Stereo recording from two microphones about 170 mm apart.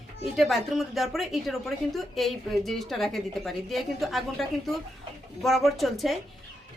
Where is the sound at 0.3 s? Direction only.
Centre (ahead or behind).